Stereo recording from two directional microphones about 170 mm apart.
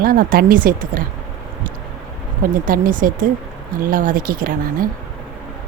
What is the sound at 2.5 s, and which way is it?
A woman's voice, 55° right (ahead or behind).